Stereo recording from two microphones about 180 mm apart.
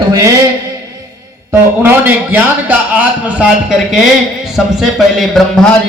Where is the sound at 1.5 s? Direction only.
10° right (ahead or behind).